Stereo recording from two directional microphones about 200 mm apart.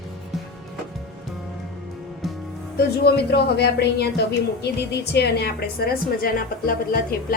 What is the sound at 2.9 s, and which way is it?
A woman's voice, 55° left (ahead or behind).